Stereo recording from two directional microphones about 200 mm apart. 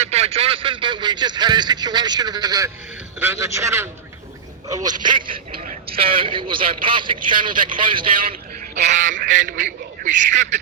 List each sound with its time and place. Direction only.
0.0 s a man's voice: 30° right (ahead or behind)
8.8 s a man's voice: 35° right (ahead or behind)